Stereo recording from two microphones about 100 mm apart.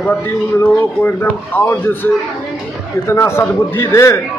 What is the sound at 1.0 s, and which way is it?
A man's voice, 20° left (ahead or behind).